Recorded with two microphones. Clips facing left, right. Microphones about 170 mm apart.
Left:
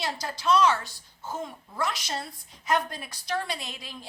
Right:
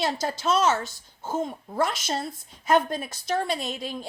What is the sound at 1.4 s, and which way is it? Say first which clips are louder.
Speech: right 7 dB; 50° right (ahead or behind).